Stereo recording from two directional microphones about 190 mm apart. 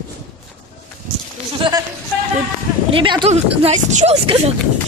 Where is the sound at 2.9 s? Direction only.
25° right (ahead or behind).